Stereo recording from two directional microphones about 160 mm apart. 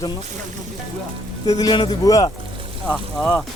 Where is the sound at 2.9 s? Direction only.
5° left (ahead or behind).